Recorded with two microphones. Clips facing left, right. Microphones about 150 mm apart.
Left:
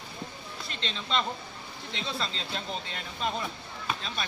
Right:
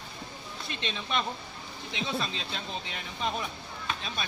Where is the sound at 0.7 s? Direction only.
15° right (ahead or behind).